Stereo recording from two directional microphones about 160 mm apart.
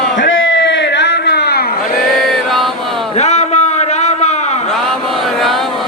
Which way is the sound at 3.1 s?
45° left (ahead or behind).